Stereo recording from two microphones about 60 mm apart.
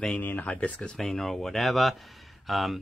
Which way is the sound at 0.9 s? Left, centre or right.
Centre.